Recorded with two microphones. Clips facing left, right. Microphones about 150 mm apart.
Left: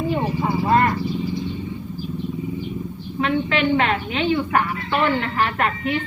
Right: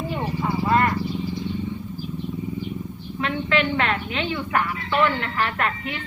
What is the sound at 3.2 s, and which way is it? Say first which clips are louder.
A woman's voice: left 3 dB; 20° left (ahead or behind).